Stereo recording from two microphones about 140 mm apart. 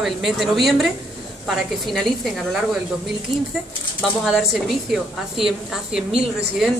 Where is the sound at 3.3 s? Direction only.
45° right (ahead or behind).